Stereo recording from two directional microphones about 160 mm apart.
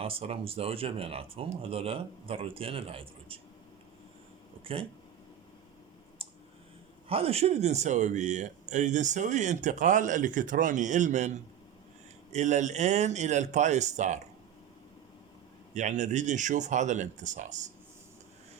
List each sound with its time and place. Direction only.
0.0 s speech: 35° right (ahead or behind)
4.6 s speech: 35° right (ahead or behind)
6.2 s clicking: 35° right (ahead or behind)
7.1 s a man's voice: 40° right (ahead or behind)
15.7 s a man's voice: 45° right (ahead or behind)